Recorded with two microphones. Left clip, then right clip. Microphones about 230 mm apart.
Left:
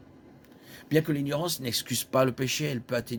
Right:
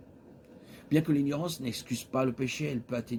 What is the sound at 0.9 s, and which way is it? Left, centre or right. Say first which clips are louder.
Speech: left 2 dB; left.